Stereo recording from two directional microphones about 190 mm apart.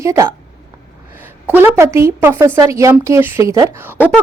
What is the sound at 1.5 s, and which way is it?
A woman's voice, 10° right (ahead or behind).